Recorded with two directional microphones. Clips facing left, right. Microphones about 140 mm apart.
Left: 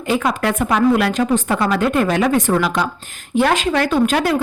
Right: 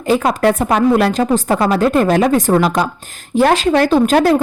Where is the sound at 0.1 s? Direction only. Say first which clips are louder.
Right 5 dB; 35° right (ahead or behind).